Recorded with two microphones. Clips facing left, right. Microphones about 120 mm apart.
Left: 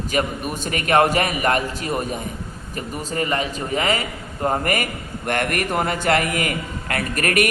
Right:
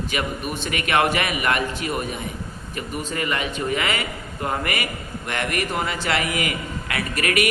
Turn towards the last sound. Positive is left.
turn(degrees=45)  # may be behind; listen again after turning